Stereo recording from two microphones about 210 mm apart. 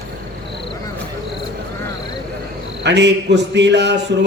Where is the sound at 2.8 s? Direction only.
55° right (ahead or behind).